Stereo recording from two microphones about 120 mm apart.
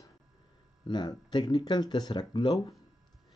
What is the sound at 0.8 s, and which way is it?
Speech, 40° left (ahead or behind).